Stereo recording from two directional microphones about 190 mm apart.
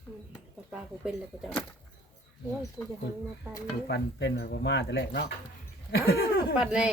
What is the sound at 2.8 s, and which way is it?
Speech, 10° left (ahead or behind).